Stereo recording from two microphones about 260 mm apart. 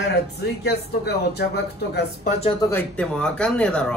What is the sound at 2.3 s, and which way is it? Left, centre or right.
Speech, left.